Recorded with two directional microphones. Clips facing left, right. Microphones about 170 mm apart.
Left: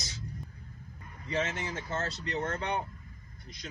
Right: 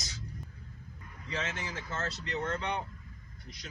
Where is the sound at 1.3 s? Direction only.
35° left (ahead or behind).